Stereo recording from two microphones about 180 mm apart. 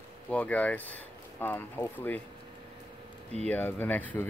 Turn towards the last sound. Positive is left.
turn(degrees=10)  # may be behind; listen again after turning